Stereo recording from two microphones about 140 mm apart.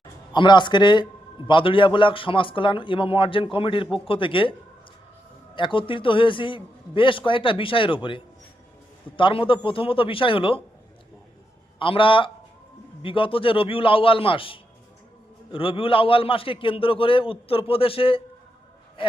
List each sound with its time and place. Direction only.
0.3 s a man's voice: 35° left (ahead or behind)
5.5 s a man's voice: 35° left (ahead or behind)
11.8 s a man's voice: 35° left (ahead or behind)